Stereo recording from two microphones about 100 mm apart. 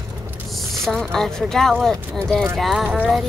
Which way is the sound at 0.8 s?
5° left (ahead or behind).